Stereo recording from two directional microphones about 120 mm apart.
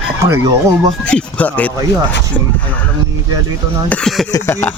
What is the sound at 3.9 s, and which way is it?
Speech, 5° left (ahead or behind).